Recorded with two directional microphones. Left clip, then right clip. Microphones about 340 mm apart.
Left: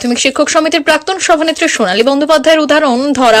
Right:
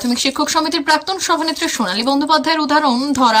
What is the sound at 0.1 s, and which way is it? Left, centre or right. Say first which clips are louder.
A woman's voice: left 7 dB; centre.